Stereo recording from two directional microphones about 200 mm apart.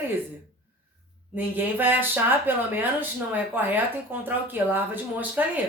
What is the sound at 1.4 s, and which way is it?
A woman's voice, 10° right (ahead or behind).